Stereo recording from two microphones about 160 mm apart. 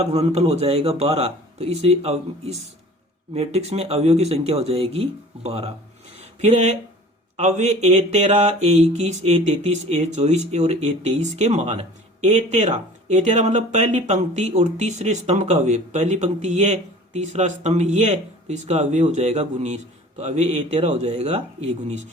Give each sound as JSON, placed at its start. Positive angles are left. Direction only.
{"t": 0.0, "sound": "a man's voice", "side_deg": -40}